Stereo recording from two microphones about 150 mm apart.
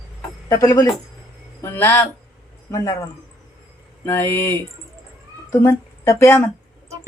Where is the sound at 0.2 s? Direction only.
20° left (ahead or behind).